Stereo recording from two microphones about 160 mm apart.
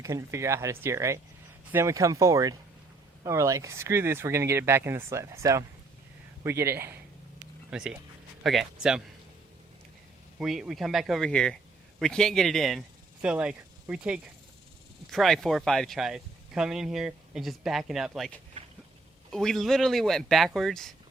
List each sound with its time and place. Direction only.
0.0 s speech: 20° right (ahead or behind); by 9.0 s 5° right (ahead or behind)
10.3 s speech: 5° right (ahead or behind)
19.3 s speech: centre (ahead or behind)